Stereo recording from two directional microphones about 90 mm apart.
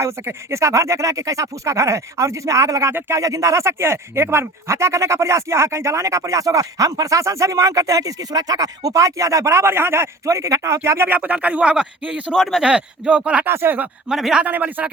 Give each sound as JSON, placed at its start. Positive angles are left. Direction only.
{"t": 0.0, "sound": "speech", "side_deg": -30}
{"t": 13.5, "sound": "a man's voice", "side_deg": -25}
{"t": 14.1, "sound": "a man's voice", "side_deg": -5}
{"t": 14.4, "sound": "a man's voice", "side_deg": -20}